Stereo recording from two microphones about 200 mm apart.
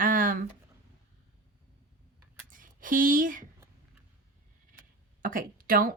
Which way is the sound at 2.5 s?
40° right (ahead or behind).